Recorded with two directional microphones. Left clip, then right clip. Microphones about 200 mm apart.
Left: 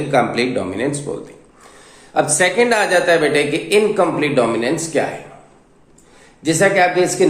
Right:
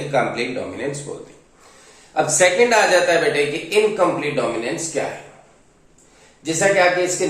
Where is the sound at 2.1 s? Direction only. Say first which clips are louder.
Even; 45° left (ahead or behind).